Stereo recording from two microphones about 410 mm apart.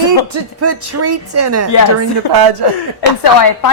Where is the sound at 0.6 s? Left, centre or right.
Right.